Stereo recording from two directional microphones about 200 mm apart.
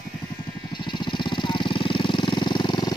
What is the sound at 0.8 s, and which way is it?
Jackhammer, 25° left (ahead or behind).